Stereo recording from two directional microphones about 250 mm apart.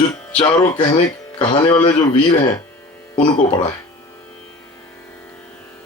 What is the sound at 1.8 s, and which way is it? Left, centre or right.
Speech, centre.